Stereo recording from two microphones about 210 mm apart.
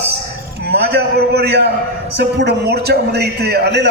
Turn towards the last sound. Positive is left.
turn(degrees=-50)  # may be behind; listen again after turning